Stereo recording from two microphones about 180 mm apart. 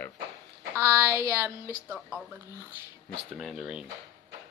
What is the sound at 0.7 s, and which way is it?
Speech, 15° right (ahead or behind).